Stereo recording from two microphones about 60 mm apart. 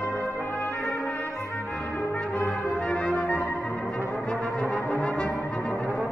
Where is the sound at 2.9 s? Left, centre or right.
Left.